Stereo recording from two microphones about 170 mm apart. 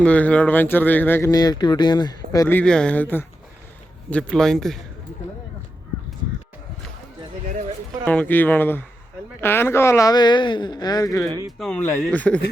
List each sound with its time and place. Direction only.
0.0 s a man's voice: 5° left (ahead or behind)
8.0 s speech: 10° left (ahead or behind)
11.3 s speech: 20° right (ahead or behind)
11.6 s speech: 5° left (ahead or behind)